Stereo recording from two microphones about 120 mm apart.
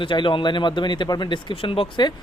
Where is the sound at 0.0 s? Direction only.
45° left (ahead or behind).